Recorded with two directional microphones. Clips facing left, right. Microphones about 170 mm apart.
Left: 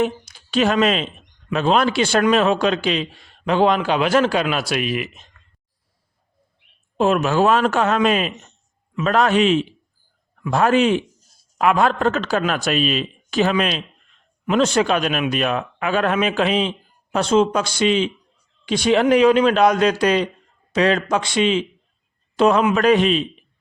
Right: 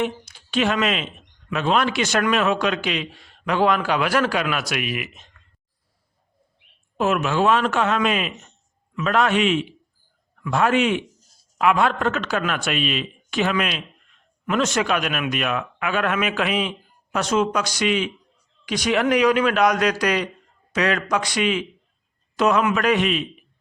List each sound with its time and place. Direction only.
0.0 s a man's voice: 40° left (ahead or behind)
6.9 s a man's voice: 30° left (ahead or behind)